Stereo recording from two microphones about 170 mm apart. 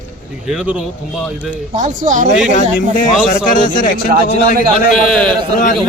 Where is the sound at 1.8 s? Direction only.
45° right (ahead or behind).